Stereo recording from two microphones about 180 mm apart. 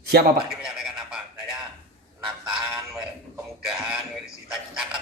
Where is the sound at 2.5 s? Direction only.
5° right (ahead or behind).